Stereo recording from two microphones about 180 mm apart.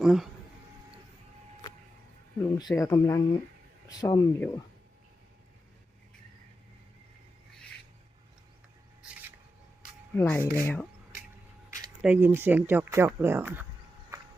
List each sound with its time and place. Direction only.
0.0 s speech: 5° right (ahead or behind)
2.6 s speech: 20° left (ahead or behind)
9.0 s a sound: 5° right (ahead or behind)
10.2 s speech: 10° left (ahead or behind)
12.0 s speech: 10° right (ahead or behind)